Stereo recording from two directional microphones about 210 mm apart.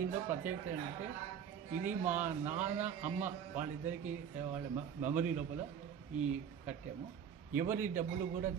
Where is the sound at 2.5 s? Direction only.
10° right (ahead or behind).